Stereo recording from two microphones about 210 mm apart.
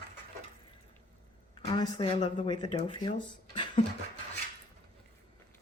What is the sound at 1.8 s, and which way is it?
Speech, 20° left (ahead or behind).